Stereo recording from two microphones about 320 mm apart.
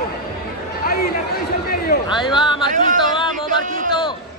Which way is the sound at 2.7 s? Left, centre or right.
Right.